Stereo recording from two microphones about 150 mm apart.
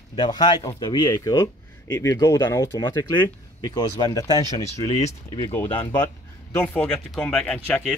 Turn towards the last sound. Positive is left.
turn(degrees=10)  # may be behind; listen again after turning